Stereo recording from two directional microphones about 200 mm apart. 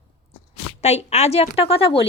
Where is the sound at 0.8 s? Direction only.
35° left (ahead or behind).